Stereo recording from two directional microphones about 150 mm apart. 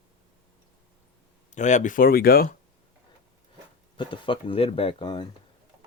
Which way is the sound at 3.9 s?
35° left (ahead or behind).